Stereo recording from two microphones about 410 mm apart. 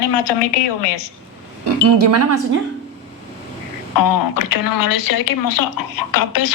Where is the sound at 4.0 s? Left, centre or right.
Left.